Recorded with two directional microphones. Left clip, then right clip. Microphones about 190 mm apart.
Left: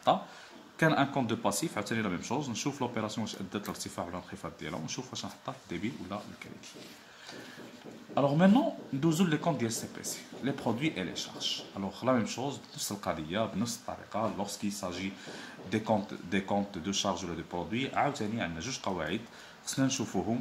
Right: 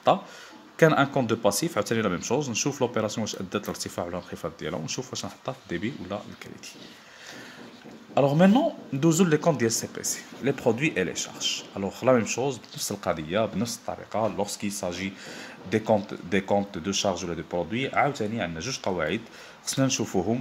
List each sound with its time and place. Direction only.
0.7 s speech: 35° right (ahead or behind)
8.1 s speech: 40° right (ahead or behind)